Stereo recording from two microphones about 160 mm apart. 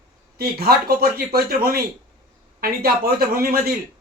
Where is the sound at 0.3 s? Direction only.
70° right (ahead or behind).